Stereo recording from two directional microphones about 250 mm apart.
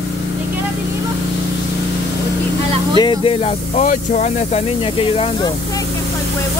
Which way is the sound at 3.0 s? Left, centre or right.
Left.